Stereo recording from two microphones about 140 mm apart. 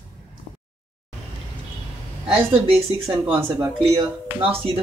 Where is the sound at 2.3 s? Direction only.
40° right (ahead or behind).